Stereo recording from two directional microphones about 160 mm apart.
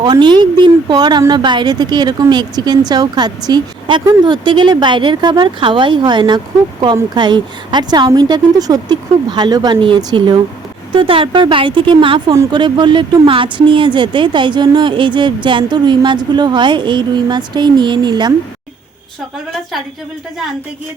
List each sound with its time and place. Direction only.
0.0 s speech: 30° right (ahead or behind)